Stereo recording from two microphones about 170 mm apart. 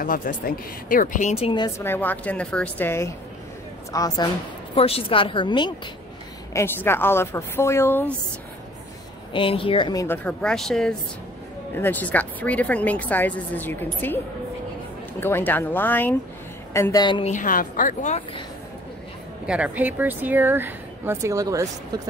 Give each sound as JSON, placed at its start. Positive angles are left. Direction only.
{"t": 0.0, "sound": "speech", "side_deg": 55}
{"t": 1.3, "sound": "speech", "side_deg": 30}
{"t": 1.8, "sound": "a woman's voice", "side_deg": 10}
{"t": 4.7, "sound": "a woman's voice", "side_deg": 35}
{"t": 6.5, "sound": "speech", "side_deg": 15}
{"t": 9.3, "sound": "speech", "side_deg": 30}
{"t": 10.0, "sound": "a woman's voice", "side_deg": 10}
{"t": 17.2, "sound": "speech", "side_deg": 50}
{"t": 19.4, "sound": "speech", "side_deg": -5}